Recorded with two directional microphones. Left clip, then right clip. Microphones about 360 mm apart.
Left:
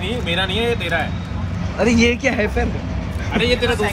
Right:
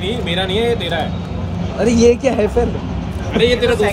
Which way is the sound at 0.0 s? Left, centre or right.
Centre.